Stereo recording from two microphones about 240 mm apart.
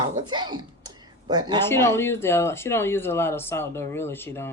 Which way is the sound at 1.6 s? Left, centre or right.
Centre.